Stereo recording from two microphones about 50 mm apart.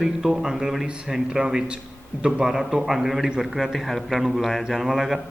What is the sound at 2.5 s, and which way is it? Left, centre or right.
A man's voice, centre.